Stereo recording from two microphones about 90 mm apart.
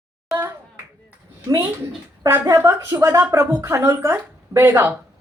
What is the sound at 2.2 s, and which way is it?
Speech, 25° right (ahead or behind).